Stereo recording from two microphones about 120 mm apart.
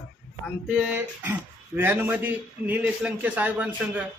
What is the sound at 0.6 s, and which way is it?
A man's voice, 10° right (ahead or behind).